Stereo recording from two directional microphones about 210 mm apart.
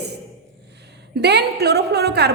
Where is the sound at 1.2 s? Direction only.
50° right (ahead or behind).